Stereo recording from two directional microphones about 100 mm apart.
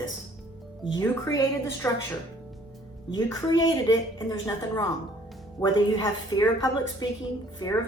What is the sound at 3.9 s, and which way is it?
A woman's voice, 40° left (ahead or behind).